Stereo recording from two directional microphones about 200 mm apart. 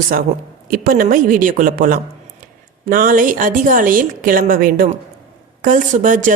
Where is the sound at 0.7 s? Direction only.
45° right (ahead or behind).